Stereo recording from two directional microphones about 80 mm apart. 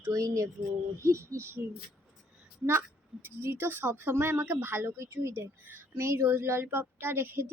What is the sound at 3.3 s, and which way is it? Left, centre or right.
A woman's voice, right.